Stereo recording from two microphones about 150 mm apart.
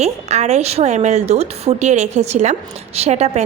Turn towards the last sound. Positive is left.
turn(degrees=-50)  # may be behind; listen again after turning